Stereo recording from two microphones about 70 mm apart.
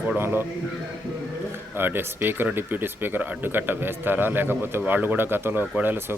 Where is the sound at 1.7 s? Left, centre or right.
Right.